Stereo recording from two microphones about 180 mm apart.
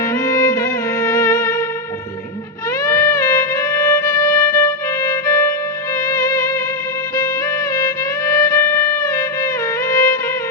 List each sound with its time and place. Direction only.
0.0 s music: 15° left (ahead or behind)
2.8 s music: 15° left (ahead or behind)
7.8 s music: 15° left (ahead or behind)